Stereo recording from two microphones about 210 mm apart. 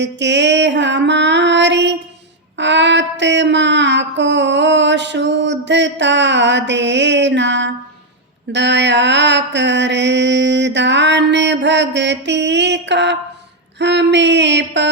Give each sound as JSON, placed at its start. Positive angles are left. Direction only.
{"t": 0.0, "sound": "child singing", "side_deg": -55}